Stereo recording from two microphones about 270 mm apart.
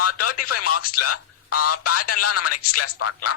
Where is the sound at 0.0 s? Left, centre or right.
Left.